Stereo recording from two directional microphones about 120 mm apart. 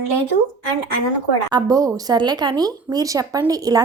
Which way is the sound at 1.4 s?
35° right (ahead or behind).